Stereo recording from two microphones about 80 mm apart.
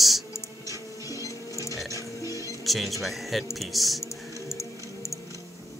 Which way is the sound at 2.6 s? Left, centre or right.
Centre.